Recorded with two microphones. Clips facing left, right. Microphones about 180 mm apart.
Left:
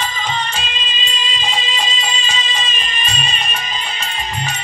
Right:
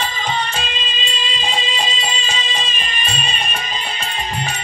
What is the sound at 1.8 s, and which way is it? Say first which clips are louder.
Music: even; 55° right (ahead or behind).